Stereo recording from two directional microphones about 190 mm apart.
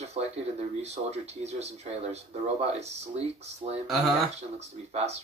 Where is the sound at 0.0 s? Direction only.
35° right (ahead or behind).